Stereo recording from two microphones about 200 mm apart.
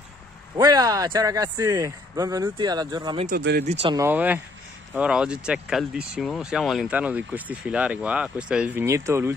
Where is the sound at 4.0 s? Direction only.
10° right (ahead or behind).